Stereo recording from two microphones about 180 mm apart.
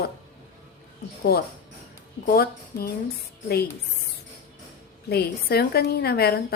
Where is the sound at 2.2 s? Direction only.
55° left (ahead or behind).